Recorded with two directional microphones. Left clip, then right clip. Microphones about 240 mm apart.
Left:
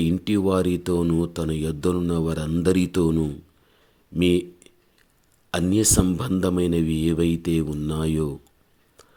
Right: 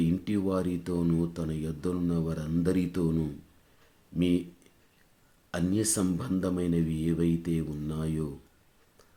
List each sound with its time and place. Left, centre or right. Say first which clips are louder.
0.0 s speech: left 7 dB; left